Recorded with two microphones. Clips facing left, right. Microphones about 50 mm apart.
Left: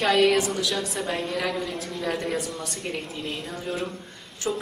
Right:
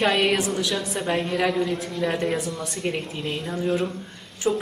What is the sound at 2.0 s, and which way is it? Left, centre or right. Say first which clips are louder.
Speech: right 3 dB; right.